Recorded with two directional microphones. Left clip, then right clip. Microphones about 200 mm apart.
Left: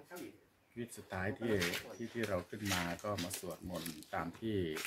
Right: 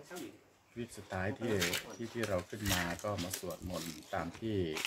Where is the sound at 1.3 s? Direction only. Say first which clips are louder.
Right 1 dB; 45° right (ahead or behind).